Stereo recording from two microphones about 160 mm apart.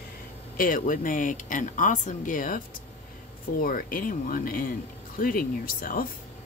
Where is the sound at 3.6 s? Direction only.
60° left (ahead or behind).